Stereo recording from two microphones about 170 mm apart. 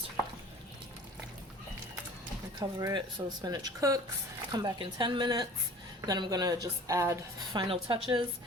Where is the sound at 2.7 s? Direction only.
20° right (ahead or behind).